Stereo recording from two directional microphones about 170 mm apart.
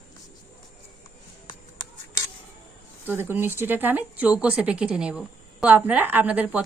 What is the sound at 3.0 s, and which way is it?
Speech, 10° right (ahead or behind).